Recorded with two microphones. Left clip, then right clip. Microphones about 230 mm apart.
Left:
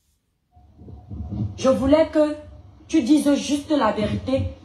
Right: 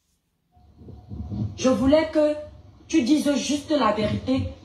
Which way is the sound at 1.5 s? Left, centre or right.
Left.